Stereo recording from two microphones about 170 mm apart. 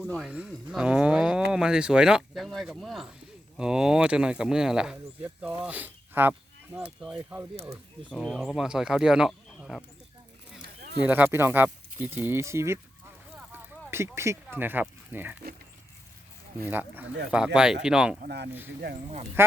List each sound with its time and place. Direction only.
0.0 s speech: centre (ahead or behind)
10.6 s a sound: 70° right (ahead or behind)
11.0 s speech: 10° right (ahead or behind)
13.3 s a sound: 10° right (ahead or behind)
16.6 s speech: 10° right (ahead or behind)
18.2 s speech: 75° right (ahead or behind)
19.4 s speech: 15° right (ahead or behind)